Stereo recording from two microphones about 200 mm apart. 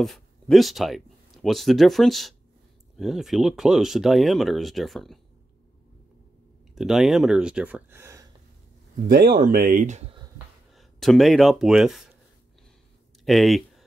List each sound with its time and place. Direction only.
0.0 s speech: centre (ahead or behind)
6.7 s speech: centre (ahead or behind)
9.0 s speech: 45° right (ahead or behind)
10.7 s speech: centre (ahead or behind)
13.2 s speech: centre (ahead or behind)